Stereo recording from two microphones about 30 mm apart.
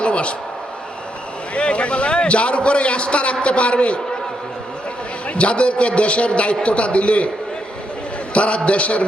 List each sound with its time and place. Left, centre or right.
0.0 s a sound: left
1.5 s a man's voice: left
5.3 s a man's voice: left
8.3 s a man's voice: left